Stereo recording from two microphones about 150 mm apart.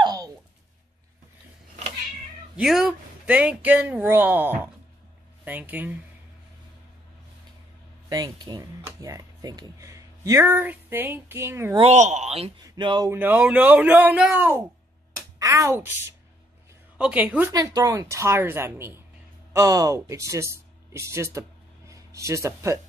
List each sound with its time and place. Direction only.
0.0 s a sound: 25° right (ahead or behind)
2.5 s speech: 5° right (ahead or behind)
8.1 s speech: 25° right (ahead or behind)
11.9 s speech: 50° right (ahead or behind)
12.6 s speech: 30° right (ahead or behind)
13.1 s speech: 15° right (ahead or behind)
17.0 s speech: 10° right (ahead or behind)
17.5 s a woman's voice: 25° right (ahead or behind)